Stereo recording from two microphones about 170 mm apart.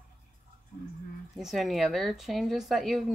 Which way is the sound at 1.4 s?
Centre (ahead or behind).